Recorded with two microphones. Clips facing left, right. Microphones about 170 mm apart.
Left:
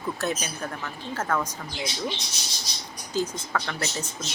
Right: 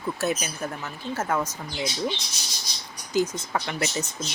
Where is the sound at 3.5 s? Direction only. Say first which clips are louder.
Right 1 dB; 15° right (ahead or behind).